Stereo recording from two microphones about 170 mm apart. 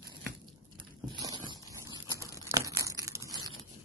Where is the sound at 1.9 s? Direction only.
20° right (ahead or behind).